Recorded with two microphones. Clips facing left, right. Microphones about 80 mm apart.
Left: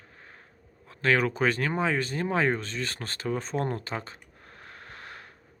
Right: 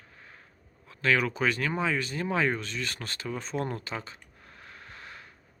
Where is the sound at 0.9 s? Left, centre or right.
Left.